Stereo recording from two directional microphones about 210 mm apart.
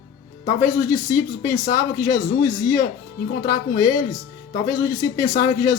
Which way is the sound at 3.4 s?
15° left (ahead or behind).